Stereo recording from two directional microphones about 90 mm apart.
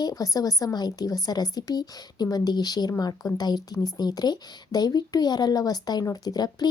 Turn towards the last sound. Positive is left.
turn(degrees=50)  # may be behind; listen again after turning